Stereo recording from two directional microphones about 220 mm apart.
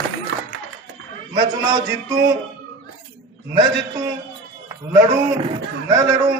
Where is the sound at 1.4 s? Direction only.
20° right (ahead or behind).